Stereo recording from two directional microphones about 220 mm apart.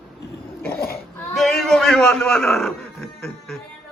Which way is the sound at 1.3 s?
Centre (ahead or behind).